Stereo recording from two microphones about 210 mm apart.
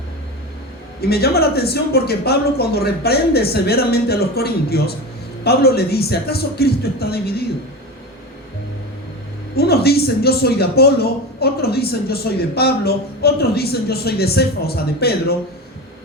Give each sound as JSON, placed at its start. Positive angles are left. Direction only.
{"t": 1.0, "sound": "a man's voice", "side_deg": 50}
{"t": 9.6, "sound": "a man's voice", "side_deg": 50}